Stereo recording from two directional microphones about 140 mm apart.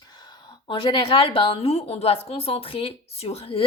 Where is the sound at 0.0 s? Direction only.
30° left (ahead or behind).